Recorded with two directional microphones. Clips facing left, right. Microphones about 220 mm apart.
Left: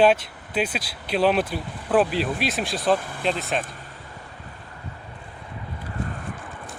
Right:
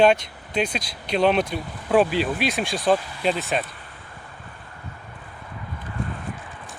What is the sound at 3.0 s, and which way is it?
Speech, 50° left (ahead or behind).